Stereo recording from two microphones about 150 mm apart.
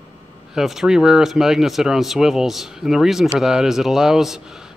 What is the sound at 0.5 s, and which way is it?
A man's voice, 5° right (ahead or behind).